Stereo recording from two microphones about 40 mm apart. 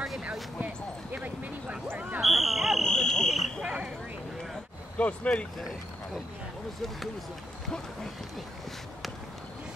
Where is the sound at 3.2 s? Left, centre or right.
Centre.